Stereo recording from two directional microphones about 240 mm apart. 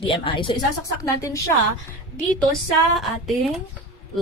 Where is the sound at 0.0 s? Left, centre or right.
Left.